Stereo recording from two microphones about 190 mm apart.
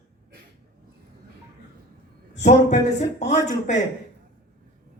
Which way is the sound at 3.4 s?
40° left (ahead or behind).